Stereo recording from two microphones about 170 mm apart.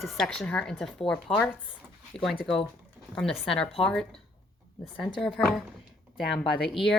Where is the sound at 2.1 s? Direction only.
5° left (ahead or behind).